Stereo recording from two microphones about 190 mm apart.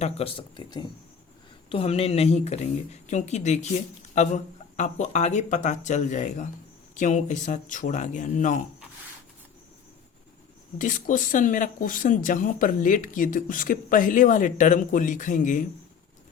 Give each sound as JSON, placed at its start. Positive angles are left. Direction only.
{"t": 0.0, "sound": "speech", "side_deg": 30}
{"t": 10.8, "sound": "speech", "side_deg": 45}